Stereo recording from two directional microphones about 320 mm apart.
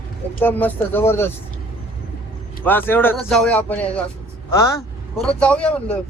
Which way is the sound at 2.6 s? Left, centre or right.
Centre.